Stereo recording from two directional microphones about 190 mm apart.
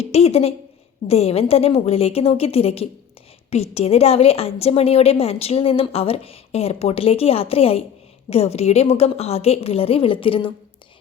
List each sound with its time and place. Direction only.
0.0 s a woman's voice: 30° left (ahead or behind)